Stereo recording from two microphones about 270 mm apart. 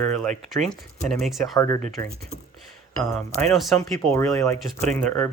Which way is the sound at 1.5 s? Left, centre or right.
Centre.